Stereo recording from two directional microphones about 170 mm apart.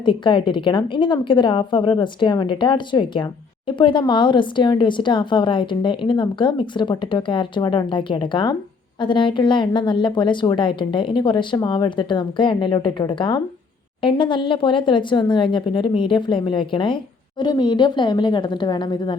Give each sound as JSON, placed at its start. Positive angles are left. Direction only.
{"t": 0.0, "sound": "speech", "side_deg": 30}